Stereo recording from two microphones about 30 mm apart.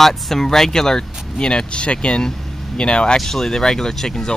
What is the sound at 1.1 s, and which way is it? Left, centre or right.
Vehicle, centre.